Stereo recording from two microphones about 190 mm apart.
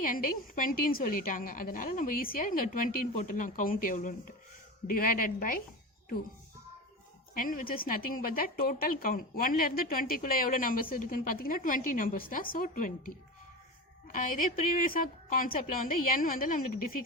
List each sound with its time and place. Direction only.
0.0 s a woman's voice: 45° left (ahead or behind)
7.3 s a woman's voice: 45° left (ahead or behind)